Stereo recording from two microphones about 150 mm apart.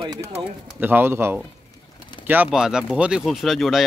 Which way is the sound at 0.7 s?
15° right (ahead or behind).